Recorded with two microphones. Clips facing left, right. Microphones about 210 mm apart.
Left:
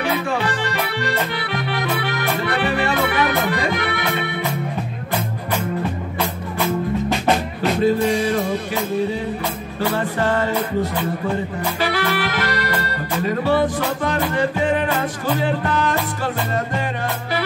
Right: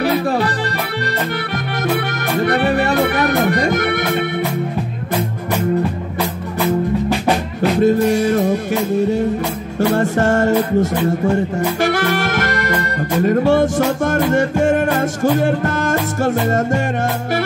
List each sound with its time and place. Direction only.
2.4 s music: 45° right (ahead or behind)
7.8 s music: 45° right (ahead or behind)
9.8 s music: 45° right (ahead or behind)